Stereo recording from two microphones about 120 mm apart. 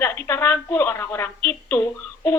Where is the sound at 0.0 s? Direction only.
20° left (ahead or behind).